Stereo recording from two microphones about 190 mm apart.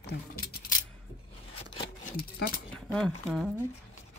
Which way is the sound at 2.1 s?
50° left (ahead or behind).